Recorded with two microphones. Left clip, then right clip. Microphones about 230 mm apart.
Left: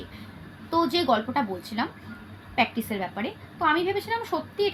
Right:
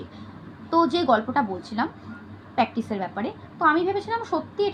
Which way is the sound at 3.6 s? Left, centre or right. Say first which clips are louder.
Right 3 dB; centre.